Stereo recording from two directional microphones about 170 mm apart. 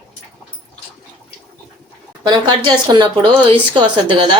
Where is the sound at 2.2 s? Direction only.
25° right (ahead or behind).